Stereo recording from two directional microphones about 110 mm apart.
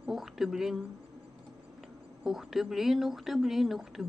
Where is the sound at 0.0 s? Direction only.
5° right (ahead or behind).